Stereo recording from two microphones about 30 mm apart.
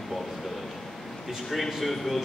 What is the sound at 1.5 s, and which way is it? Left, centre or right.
Speech, centre.